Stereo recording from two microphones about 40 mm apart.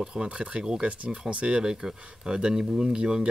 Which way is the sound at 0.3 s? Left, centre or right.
Right.